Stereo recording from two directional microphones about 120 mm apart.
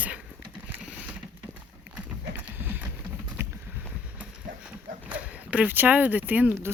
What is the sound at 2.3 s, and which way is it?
Clip-clop, 15° right (ahead or behind).